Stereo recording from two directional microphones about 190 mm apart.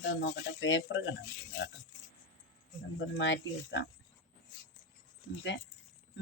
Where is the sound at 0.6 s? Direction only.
75° left (ahead or behind).